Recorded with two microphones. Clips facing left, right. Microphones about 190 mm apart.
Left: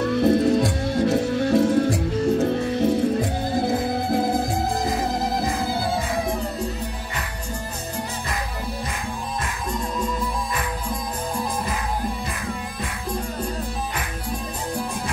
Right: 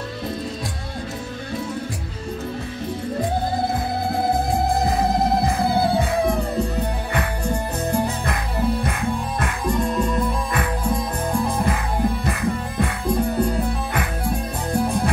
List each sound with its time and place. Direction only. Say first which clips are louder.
0.1 s music: left 11 dB; 70° left (ahead or behind)
12.3 s music: right 6 dB; 60° right (ahead or behind)